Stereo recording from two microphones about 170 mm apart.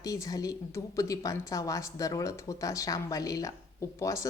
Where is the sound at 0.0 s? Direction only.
20° left (ahead or behind).